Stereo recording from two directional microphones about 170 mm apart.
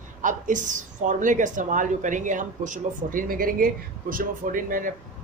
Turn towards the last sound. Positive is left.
turn(degrees=-55)  # may be behind; listen again after turning